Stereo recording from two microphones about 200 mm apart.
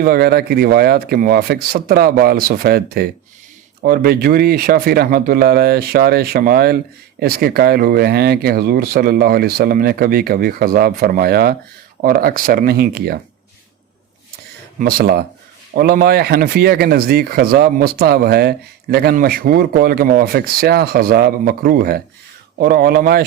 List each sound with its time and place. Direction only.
0.0 s speech: 50° right (ahead or behind)
14.8 s speech: 45° right (ahead or behind)